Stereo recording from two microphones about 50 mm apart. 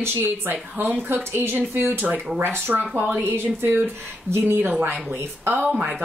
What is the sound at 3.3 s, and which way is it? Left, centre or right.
A woman's voice, right.